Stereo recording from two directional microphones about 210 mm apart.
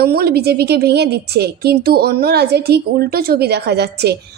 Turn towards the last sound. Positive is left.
turn(degrees=-50)  # may be behind; listen again after turning